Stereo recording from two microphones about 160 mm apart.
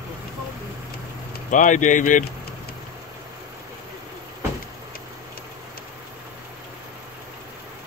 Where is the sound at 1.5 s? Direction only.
50° left (ahead or behind).